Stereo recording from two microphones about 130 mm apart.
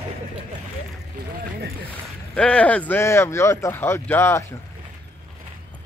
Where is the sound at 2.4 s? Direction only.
10° left (ahead or behind).